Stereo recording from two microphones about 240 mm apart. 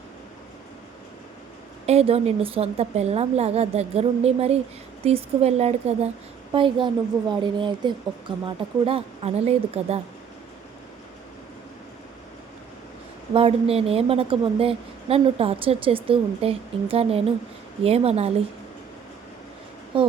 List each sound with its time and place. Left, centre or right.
1.9 s a woman's voice: right
13.3 s a woman's voice: right
19.9 s a woman's voice: right